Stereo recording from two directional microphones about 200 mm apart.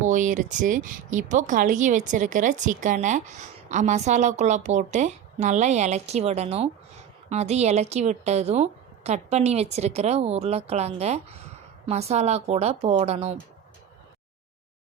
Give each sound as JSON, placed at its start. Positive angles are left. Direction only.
{"t": 0.0, "sound": "speech", "side_deg": -40}